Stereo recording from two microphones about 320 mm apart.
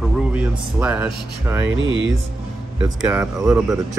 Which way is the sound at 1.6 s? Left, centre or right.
Right.